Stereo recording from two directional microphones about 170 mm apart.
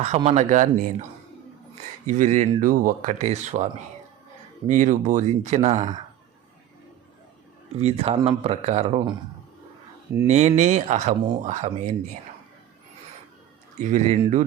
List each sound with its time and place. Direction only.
0.3 s speech: 45° right (ahead or behind)
2.0 s speech: 45° right (ahead or behind)
7.8 s speech: 35° right (ahead or behind)
10.2 s speech: 40° right (ahead or behind)
13.7 s speech: 45° right (ahead or behind)